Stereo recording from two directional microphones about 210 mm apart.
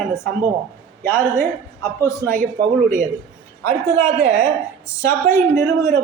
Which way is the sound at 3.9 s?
35° right (ahead or behind).